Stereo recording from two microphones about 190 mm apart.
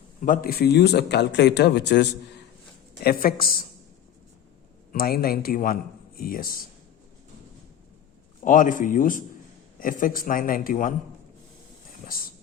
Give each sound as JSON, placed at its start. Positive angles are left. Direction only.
{"t": 0.2, "sound": "speech", "side_deg": 50}
{"t": 3.0, "sound": "a man's voice", "side_deg": 50}
{"t": 4.9, "sound": "a man's voice", "side_deg": 50}
{"t": 8.4, "sound": "a man's voice", "side_deg": 45}
{"t": 12.0, "sound": "a man's voice", "side_deg": 50}